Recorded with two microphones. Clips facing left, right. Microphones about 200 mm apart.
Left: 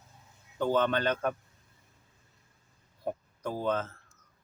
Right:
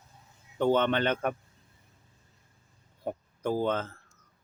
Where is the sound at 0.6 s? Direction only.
25° right (ahead or behind).